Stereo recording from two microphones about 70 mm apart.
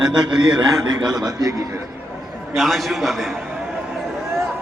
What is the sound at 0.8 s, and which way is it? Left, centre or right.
Speech, right.